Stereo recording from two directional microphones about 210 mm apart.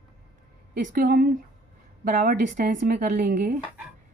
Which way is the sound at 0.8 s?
40° right (ahead or behind).